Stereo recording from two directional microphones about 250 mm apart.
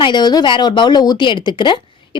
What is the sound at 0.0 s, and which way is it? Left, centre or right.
Speech, centre.